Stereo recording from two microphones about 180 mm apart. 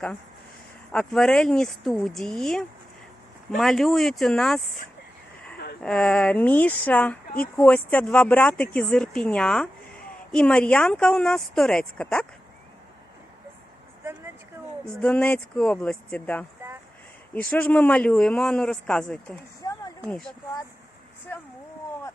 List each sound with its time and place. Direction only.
0.9 s speech: 5° left (ahead or behind)
5.8 s speech: 5° left (ahead or behind)
15.0 s speech: 10° left (ahead or behind)
19.6 s a sound: 20° left (ahead or behind)